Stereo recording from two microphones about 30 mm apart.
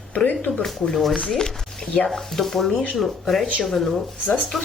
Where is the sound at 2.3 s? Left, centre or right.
Centre.